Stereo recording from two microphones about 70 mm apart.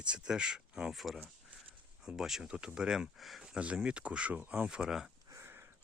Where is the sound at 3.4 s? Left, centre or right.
Centre.